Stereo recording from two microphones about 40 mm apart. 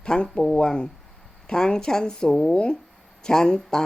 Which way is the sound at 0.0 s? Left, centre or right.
Left.